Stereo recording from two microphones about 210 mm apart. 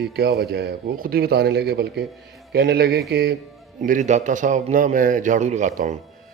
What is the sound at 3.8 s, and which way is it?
A man's voice, 35° right (ahead or behind).